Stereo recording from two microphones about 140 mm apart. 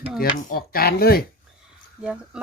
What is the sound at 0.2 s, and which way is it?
Speech, 70° left (ahead or behind).